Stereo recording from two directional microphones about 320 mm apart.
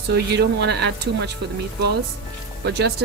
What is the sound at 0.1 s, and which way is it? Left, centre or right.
Speech, right.